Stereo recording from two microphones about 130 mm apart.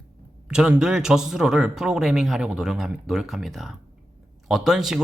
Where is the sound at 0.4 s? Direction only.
5° right (ahead or behind).